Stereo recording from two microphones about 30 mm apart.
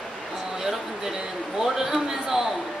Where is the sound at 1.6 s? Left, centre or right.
Centre.